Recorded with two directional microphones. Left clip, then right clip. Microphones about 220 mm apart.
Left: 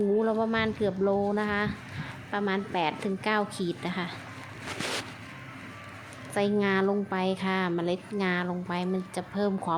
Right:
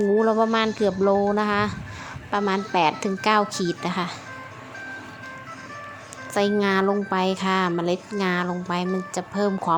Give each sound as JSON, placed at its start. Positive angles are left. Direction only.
{"t": 0.2, "sound": "speech", "side_deg": -25}
{"t": 6.3, "sound": "speech", "side_deg": -25}